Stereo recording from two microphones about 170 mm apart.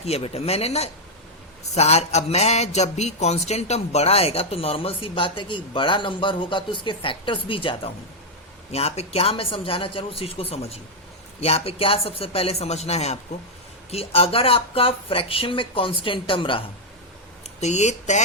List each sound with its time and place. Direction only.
0.0 s speech: 35° left (ahead or behind)
17.4 s speech: 40° left (ahead or behind)